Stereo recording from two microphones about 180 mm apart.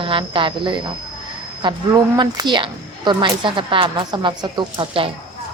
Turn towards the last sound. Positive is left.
turn(degrees=-30)  # may be behind; listen again after turning